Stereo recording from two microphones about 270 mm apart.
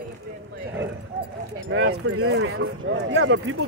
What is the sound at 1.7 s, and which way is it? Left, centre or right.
Speech, right.